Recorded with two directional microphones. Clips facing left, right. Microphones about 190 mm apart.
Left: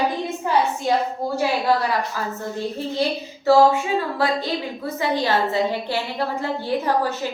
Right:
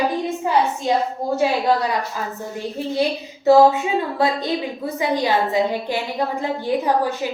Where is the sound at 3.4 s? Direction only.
20° right (ahead or behind).